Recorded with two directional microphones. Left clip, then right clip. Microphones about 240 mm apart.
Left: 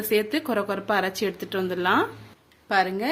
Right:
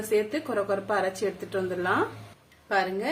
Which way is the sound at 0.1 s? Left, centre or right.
Left.